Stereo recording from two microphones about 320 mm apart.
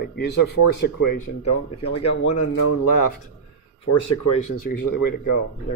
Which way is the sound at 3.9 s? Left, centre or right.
Left.